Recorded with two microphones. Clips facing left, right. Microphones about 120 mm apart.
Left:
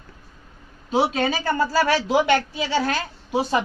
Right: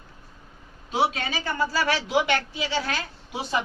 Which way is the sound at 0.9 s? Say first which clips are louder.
Left 4 dB; 35° left (ahead or behind).